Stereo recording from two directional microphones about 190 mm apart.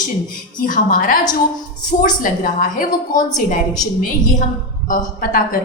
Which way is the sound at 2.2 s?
45° left (ahead or behind).